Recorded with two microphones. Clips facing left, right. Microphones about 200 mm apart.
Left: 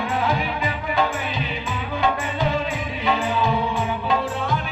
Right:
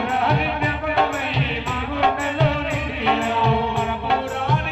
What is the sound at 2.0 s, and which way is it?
Music, 65° right (ahead or behind).